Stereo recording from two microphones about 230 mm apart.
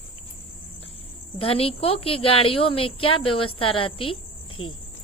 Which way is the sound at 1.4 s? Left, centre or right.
Left.